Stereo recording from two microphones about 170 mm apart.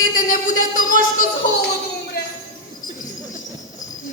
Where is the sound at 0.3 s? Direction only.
50° left (ahead or behind).